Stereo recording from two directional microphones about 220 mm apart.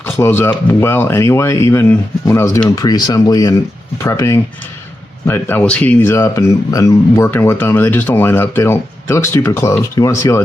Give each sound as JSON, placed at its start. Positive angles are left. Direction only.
{"t": 0.0, "sound": "speech", "side_deg": 10}